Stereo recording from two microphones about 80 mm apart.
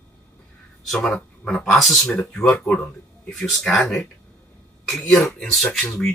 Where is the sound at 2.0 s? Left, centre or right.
Centre.